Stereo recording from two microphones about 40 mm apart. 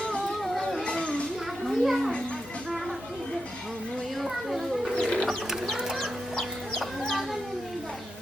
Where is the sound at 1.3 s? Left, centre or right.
Centre.